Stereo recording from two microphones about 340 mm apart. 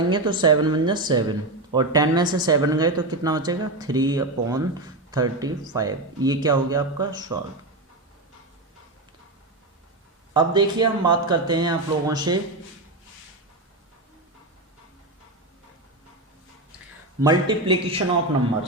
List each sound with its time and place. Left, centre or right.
0.1 s speech: centre
10.3 s speech: centre
17.2 s speech: centre